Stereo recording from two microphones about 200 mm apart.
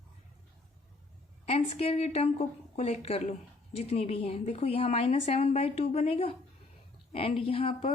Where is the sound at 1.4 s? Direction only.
30° left (ahead or behind).